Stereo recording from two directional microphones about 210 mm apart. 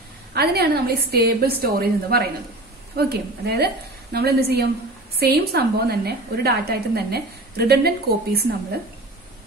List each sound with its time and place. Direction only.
0.3 s a woman's voice: 50° right (ahead or behind)